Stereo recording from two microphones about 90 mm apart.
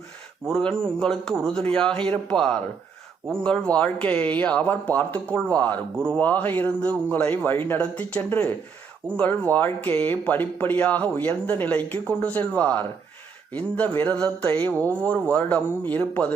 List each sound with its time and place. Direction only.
0.4 s a man's voice: 5° left (ahead or behind)